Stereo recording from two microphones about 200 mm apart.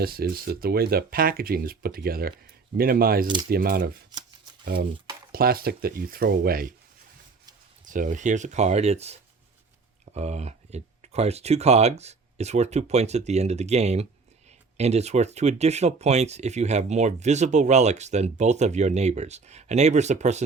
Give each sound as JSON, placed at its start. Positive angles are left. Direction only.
{"t": 0.0, "sound": "speech", "side_deg": -50}
{"t": 4.1, "sound": "shuffling cards", "side_deg": -20}
{"t": 4.6, "sound": "speech", "side_deg": -50}
{"t": 7.9, "sound": "speech", "side_deg": -40}